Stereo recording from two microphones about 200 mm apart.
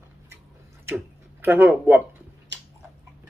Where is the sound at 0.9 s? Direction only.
10° right (ahead or behind).